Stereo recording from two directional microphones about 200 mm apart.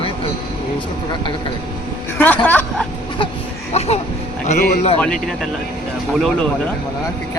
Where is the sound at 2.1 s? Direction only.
10° left (ahead or behind).